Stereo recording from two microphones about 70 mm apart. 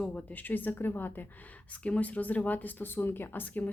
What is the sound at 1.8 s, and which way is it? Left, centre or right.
Speech, centre.